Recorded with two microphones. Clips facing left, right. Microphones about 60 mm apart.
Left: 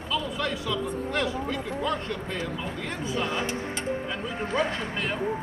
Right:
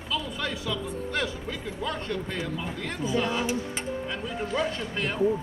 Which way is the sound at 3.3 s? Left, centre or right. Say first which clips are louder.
Right 1 dB; left.